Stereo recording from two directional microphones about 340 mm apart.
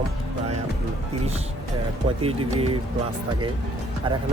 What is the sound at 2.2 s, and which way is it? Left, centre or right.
Speech, centre.